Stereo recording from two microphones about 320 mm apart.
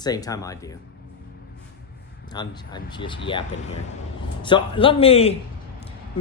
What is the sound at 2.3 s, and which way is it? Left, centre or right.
Speech, centre.